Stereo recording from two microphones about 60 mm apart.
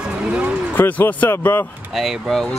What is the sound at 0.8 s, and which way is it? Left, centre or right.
Speech, left.